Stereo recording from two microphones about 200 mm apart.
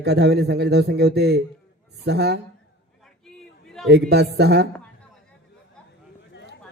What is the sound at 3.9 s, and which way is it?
Speech, 55° right (ahead or behind).